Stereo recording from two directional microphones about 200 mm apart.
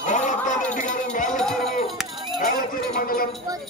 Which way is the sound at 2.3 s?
45° left (ahead or behind).